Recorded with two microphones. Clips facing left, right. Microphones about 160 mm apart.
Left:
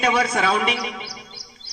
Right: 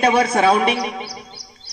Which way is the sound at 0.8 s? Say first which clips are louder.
Right 5 dB; 45° right (ahead or behind).